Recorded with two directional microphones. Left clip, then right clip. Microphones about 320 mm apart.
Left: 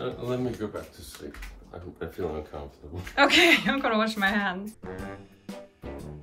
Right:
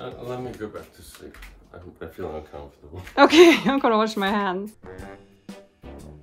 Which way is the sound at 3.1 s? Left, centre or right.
Centre.